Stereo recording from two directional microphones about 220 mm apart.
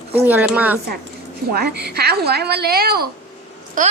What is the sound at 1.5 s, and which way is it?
A woman's voice, 45° right (ahead or behind).